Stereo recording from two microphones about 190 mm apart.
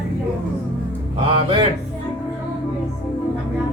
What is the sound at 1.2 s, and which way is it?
Speech, 30° right (ahead or behind).